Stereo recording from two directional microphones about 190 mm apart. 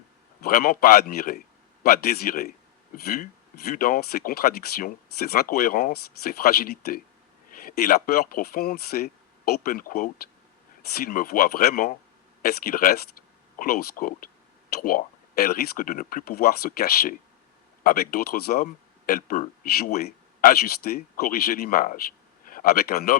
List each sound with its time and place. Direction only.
0.4 s speech: 50° left (ahead or behind)